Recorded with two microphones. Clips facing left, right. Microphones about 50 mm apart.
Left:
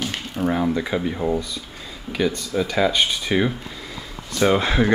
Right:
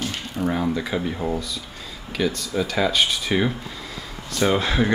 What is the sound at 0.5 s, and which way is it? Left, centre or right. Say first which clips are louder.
Speech: left 2 dB; centre.